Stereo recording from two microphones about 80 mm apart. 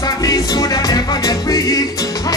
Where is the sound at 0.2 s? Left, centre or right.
Left.